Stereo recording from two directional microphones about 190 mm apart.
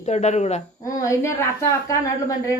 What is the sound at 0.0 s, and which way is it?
Speech, 35° left (ahead or behind).